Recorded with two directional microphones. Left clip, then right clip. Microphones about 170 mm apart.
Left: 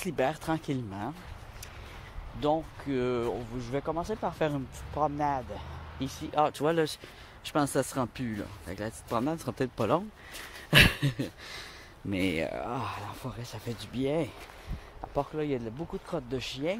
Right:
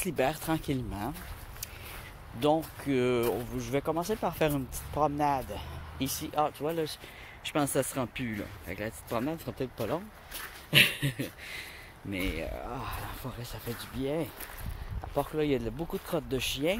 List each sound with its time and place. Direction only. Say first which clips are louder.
0.0 s speech: even; 5° left (ahead or behind)
2.4 s speech: right 2 dB; 10° right (ahead or behind)
6.4 s speech: left 5 dB; 60° left (ahead or behind)
7.4 s speech: left 1 dB; 15° left (ahead or behind)
9.8 s speech: left 6 dB; 60° left (ahead or behind)
10.7 s speech: left 2 dB; 35° left (ahead or behind)
12.3 s speech: left 5 dB; 65° left (ahead or behind)
12.9 s speech: left 1 dB; 30° left (ahead or behind)
15.3 s speech: right 3 dB; 5° right (ahead or behind)